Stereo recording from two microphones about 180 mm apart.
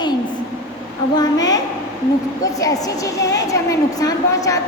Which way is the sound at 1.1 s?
20° left (ahead or behind).